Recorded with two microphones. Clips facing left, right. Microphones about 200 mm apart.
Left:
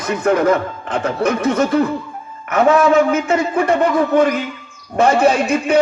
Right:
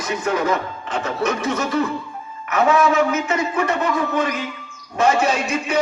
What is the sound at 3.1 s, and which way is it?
A man's voice, 50° left (ahead or behind).